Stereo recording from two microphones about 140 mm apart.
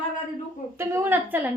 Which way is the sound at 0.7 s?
20° right (ahead or behind).